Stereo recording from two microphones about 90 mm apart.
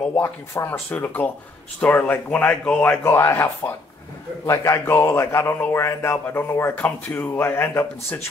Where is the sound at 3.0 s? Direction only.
25° left (ahead or behind).